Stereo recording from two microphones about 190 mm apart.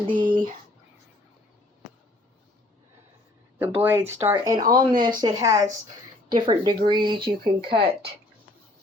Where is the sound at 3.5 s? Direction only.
10° right (ahead or behind); by 7.9 s 30° right (ahead or behind).